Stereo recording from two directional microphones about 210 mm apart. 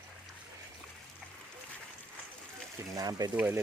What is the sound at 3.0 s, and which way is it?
Speech, 15° right (ahead or behind).